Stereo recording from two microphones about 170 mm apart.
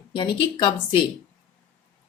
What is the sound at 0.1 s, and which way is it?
Speech, 30° left (ahead or behind).